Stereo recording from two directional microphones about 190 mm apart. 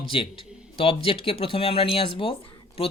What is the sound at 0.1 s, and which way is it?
Speech, 30° left (ahead or behind).